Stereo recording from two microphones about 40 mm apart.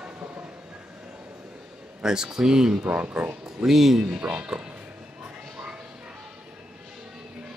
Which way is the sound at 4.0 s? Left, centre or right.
Right.